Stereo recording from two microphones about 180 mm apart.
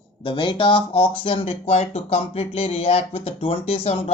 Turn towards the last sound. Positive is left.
turn(degrees=35)  # may be behind; listen again after turning